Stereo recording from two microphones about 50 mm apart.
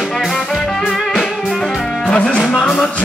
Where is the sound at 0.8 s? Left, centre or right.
Centre.